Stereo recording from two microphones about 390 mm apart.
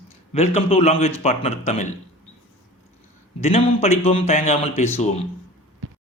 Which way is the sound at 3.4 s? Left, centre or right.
Centre.